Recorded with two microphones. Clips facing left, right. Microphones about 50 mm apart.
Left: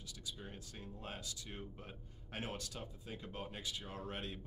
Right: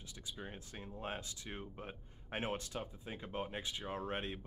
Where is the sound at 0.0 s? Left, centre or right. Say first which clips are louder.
Right 2 dB; right.